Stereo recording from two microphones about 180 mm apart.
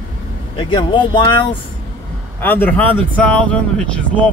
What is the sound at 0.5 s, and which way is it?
Speech, 25° left (ahead or behind).